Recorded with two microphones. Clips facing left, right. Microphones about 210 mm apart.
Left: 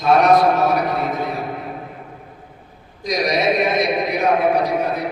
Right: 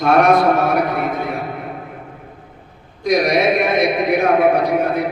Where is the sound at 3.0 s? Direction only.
55° right (ahead or behind).